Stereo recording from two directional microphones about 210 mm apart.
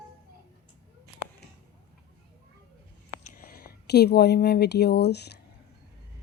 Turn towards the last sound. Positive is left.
turn(degrees=50)  # may be behind; listen again after turning